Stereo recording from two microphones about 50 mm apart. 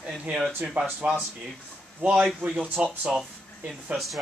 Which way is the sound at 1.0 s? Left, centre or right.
Right.